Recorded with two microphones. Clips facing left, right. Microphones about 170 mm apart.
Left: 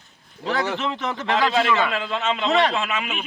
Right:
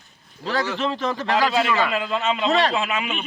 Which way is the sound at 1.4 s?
Centre (ahead or behind).